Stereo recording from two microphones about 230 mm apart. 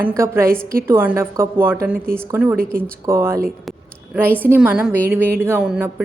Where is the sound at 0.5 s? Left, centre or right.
Right.